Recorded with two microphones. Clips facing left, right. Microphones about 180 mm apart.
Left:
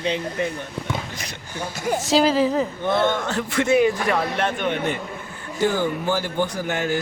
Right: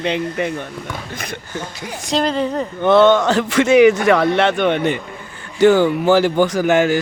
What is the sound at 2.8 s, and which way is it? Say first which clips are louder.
Speech: right 14 dB; 70° right (ahead or behind).